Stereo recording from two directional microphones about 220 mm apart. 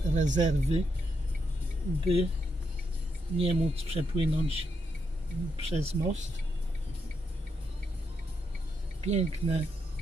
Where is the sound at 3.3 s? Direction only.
25° right (ahead or behind).